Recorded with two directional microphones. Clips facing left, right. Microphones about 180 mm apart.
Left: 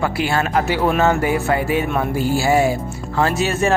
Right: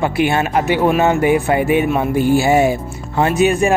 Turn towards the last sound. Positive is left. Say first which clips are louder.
# right 4 dB
turn(degrees=-15)  # may be behind; listen again after turning